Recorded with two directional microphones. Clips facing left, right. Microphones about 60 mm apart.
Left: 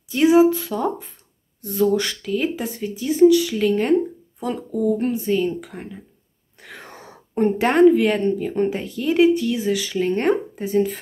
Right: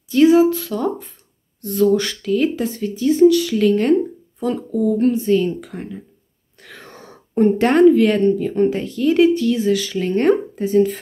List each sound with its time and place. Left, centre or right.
0.1 s a woman's voice: centre